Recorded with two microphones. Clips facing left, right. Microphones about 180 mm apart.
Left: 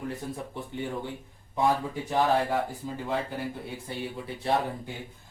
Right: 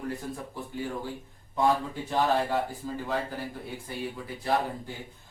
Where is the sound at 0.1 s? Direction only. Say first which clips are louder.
Even; 25° left (ahead or behind).